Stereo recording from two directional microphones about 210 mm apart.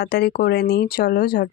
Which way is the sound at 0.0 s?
50° left (ahead or behind).